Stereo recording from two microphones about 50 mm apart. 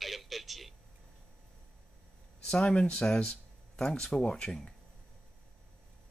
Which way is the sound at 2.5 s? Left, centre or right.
Left.